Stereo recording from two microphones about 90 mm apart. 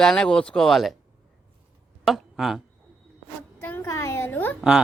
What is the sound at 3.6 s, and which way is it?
Speech, 20° left (ahead or behind).